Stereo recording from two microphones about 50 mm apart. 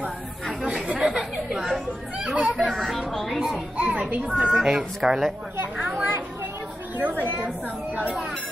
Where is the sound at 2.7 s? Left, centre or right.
Centre.